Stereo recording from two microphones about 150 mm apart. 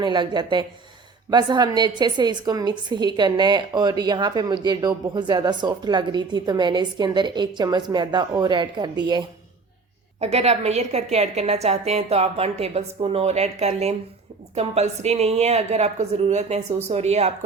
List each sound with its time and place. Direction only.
0.0 s a woman's voice: 30° right (ahead or behind)
10.2 s a woman's voice: 45° right (ahead or behind)